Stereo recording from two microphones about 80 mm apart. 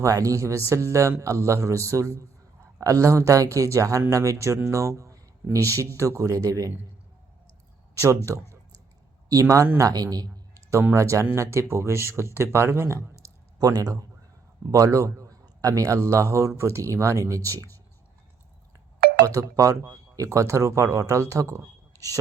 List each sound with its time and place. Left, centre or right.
0.0 s speech: right
7.9 s a man's voice: right
14.7 s speech: right
19.2 s speech: right
21.9 s a sound: right